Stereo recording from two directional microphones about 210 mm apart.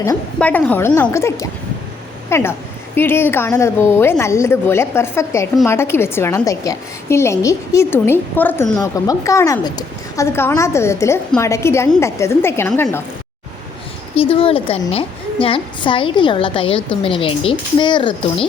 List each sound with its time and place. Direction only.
0.3 s a woman's voice: 5° left (ahead or behind)
14.2 s a woman's voice: 25° left (ahead or behind)